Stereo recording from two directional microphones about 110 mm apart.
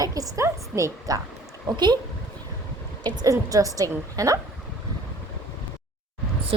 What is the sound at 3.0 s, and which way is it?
A woman's voice, 35° right (ahead or behind).